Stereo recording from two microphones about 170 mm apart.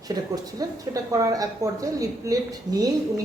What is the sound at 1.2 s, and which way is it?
A woman's voice, 20° right (ahead or behind).